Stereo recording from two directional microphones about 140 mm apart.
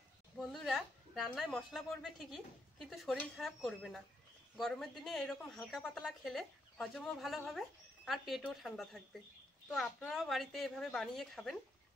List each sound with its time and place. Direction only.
0.4 s speech: centre (ahead or behind)